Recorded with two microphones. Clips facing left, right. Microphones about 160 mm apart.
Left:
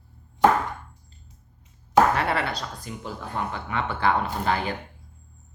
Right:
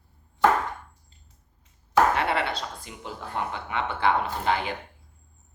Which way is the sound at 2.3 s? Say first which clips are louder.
Even; 25° right (ahead or behind).